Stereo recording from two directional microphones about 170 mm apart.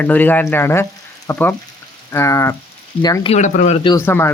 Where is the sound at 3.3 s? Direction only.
45° left (ahead or behind).